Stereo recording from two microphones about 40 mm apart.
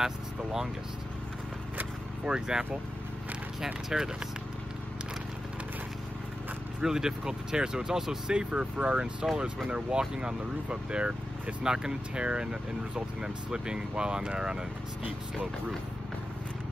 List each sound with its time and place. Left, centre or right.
0.0 s speech: centre
2.2 s speech: centre
6.8 s speech: centre